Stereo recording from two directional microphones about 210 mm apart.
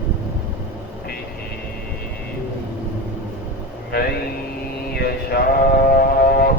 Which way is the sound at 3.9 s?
50° left (ahead or behind).